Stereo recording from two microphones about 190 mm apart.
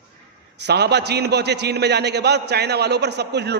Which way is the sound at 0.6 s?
60° right (ahead or behind).